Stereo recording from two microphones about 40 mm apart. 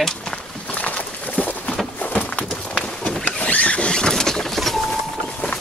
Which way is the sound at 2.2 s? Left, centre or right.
Left.